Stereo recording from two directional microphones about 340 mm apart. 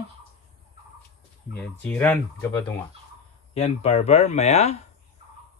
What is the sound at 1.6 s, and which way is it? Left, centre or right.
Speech, centre.